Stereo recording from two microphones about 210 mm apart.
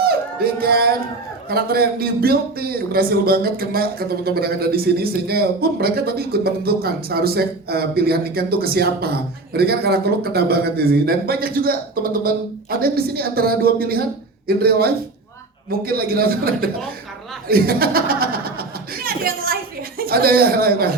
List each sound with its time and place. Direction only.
0.0 s music: 45° right (ahead or behind)
1.5 s a man's voice: 45° right (ahead or behind)
18.9 s a sound: 45° right (ahead or behind)
20.0 s a man's voice: 45° right (ahead or behind)